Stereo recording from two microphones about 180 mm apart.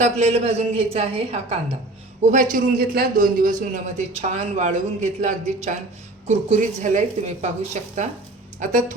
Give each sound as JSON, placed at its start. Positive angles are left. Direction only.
{"t": 0.0, "sound": "speech", "side_deg": -40}
{"t": 2.2, "sound": "a man's voice", "side_deg": -45}